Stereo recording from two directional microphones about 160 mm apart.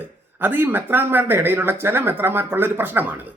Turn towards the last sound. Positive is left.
turn(degrees=-10)  # may be behind; listen again after turning